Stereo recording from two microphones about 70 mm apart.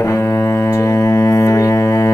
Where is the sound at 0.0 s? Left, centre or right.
Left.